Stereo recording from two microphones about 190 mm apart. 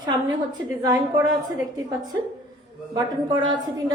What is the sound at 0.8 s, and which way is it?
Speech, 20° right (ahead or behind).